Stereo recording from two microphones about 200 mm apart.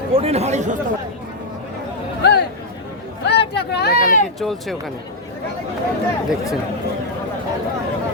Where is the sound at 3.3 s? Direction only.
55° left (ahead or behind).